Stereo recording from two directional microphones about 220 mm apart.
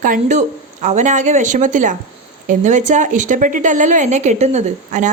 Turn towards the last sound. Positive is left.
turn(degrees=-35)  # may be behind; listen again after turning